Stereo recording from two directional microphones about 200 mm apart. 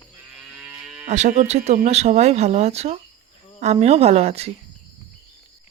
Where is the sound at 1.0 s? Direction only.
35° right (ahead or behind).